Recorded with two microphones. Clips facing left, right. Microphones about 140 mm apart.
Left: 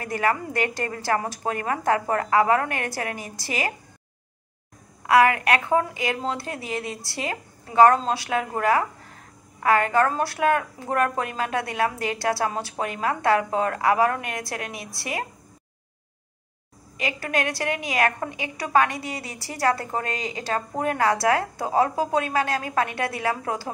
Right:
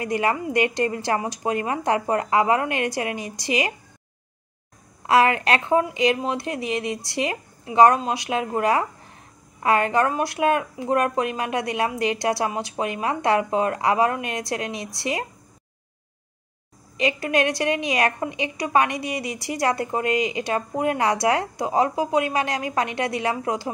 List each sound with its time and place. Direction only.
0.0 s a woman's voice: 20° right (ahead or behind)
5.0 s a woman's voice: 25° right (ahead or behind)
16.9 s a woman's voice: 20° right (ahead or behind)